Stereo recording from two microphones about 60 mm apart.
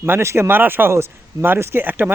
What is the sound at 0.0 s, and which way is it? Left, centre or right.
A man's voice, right.